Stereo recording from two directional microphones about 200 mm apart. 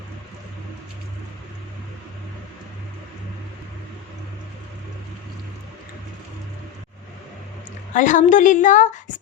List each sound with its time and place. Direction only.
7.9 s a woman's voice: 40° left (ahead or behind)